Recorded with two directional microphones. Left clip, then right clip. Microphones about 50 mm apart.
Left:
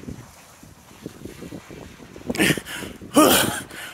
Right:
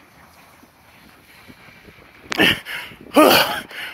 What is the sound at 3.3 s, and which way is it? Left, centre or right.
Gasp, centre.